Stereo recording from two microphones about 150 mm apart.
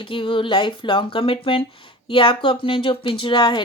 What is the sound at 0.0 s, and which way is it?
Speech, 35° left (ahead or behind).